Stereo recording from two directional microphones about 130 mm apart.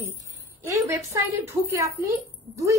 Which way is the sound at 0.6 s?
20° right (ahead or behind).